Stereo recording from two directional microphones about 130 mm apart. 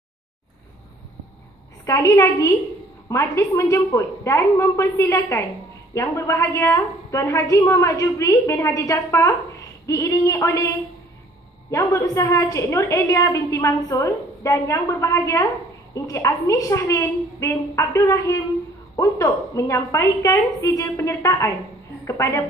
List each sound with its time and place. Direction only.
1.9 s a woman's voice: 25° left (ahead or behind)
11.7 s a woman's voice: 25° left (ahead or behind)